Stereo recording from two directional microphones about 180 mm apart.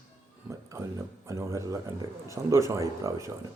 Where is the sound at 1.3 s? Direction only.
15° right (ahead or behind).